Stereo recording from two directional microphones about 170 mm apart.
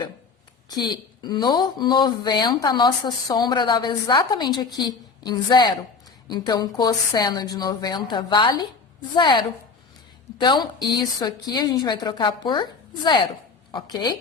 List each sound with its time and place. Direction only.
1.2 s a woman's voice: 25° left (ahead or behind)